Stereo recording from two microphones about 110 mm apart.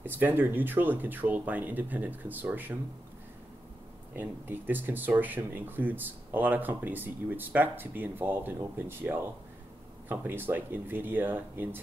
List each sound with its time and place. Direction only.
0.0 s speech: 20° right (ahead or behind)
4.1 s speech: 20° right (ahead or behind)